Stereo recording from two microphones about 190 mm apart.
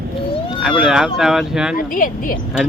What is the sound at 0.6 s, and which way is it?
Speech, centre (ahead or behind).